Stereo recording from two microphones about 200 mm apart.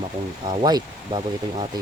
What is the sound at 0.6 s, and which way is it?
Speech, 20° right (ahead or behind).